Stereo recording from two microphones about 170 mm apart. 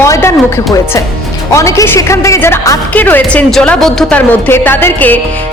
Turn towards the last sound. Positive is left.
turn(degrees=10)  # may be behind; listen again after turning